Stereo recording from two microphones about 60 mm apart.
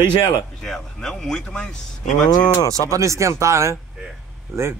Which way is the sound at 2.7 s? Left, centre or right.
Right.